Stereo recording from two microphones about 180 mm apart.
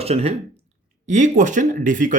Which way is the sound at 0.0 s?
35° right (ahead or behind).